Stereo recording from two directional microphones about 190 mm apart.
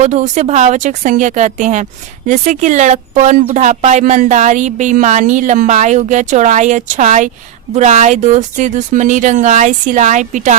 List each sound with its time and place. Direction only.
0.0 s speech: 35° right (ahead or behind)